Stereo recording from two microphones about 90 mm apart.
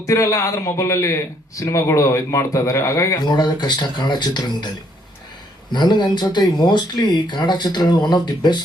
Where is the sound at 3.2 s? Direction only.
55° left (ahead or behind).